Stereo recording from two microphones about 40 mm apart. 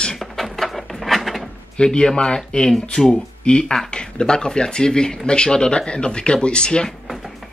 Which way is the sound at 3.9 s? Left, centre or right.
Left.